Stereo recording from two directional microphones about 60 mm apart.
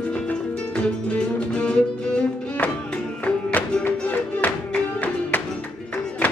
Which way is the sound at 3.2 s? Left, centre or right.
Centre.